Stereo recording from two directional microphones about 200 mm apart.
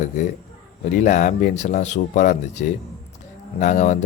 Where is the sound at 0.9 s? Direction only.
40° left (ahead or behind).